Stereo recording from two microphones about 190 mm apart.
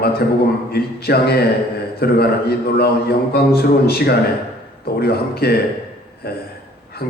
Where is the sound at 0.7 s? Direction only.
55° left (ahead or behind).